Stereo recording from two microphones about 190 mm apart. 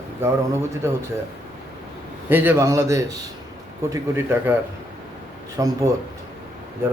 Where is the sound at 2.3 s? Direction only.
10° right (ahead or behind).